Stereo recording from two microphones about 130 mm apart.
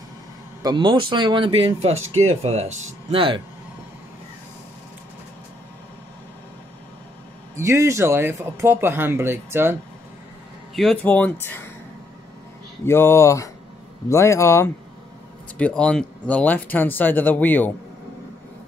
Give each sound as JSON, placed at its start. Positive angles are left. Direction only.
{"t": 0.6, "sound": "speech", "side_deg": -35}
{"t": 7.5, "sound": "speech", "side_deg": -20}
{"t": 10.7, "sound": "speech", "side_deg": 0}
{"t": 11.0, "sound": "speech", "side_deg": 10}
{"t": 12.8, "sound": "speech", "side_deg": 20}
{"t": 15.5, "sound": "speech", "side_deg": 10}